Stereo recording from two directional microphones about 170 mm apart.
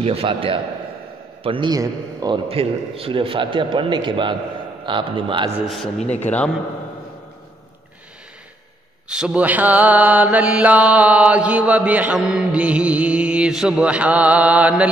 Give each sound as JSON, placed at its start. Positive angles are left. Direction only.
{"t": 0.0, "sound": "a man's voice", "side_deg": -35}
{"t": 2.4, "sound": "a man's voice", "side_deg": -35}
{"t": 5.7, "sound": "a man's voice", "side_deg": 0}
{"t": 9.1, "sound": "mantra", "side_deg": -5}